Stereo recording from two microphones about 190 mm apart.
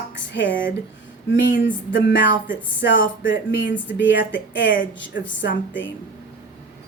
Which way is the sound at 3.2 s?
75° left (ahead or behind).